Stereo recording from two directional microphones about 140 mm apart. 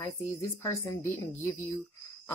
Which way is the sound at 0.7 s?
20° left (ahead or behind).